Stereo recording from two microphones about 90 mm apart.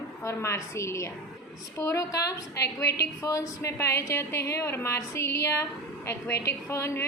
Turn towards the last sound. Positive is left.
turn(degrees=30)  # may be behind; listen again after turning